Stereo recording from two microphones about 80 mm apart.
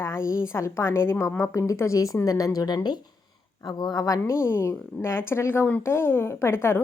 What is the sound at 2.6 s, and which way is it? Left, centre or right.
Speech, left.